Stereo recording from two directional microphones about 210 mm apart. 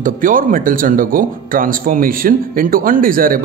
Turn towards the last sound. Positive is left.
turn(degrees=-40)  # may be behind; listen again after turning